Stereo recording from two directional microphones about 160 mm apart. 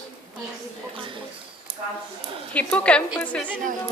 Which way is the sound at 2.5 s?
5° left (ahead or behind).